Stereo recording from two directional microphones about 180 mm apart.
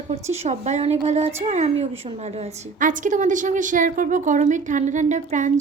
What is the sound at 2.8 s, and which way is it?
A woman's voice, 45° right (ahead or behind).